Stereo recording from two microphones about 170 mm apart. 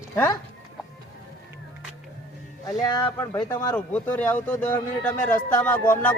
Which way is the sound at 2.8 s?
25° left (ahead or behind).